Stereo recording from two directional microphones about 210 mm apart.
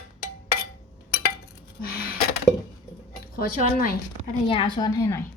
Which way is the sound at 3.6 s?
40° left (ahead or behind).